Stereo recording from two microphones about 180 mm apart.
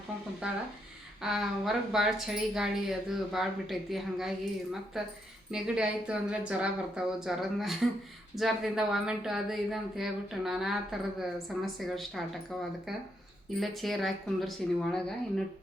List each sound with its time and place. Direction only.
0.4 s speech: 5° right (ahead or behind)
5.5 s speech: 5° right (ahead or behind)